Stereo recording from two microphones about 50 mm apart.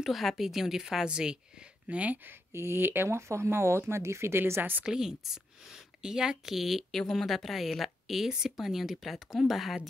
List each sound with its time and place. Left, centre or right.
0.0 s a woman's voice: centre; by 2.1 s right
2.5 s speech: right
3.2 s speech: right
4.8 s a woman's voice: centre